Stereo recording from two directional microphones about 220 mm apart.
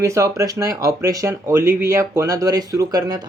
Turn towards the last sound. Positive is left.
turn(degrees=-15)  # may be behind; listen again after turning